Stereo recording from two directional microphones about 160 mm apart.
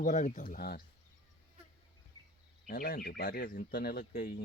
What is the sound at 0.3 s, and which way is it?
Speech, 60° left (ahead or behind).